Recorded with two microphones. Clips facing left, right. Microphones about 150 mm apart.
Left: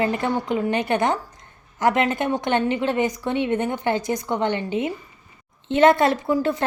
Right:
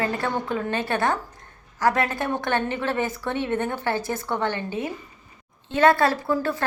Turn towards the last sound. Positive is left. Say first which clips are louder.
# left 3 dB
turn(degrees=20)  # may be behind; listen again after turning